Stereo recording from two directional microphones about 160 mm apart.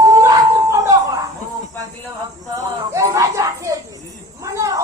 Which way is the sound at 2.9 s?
20° right (ahead or behind).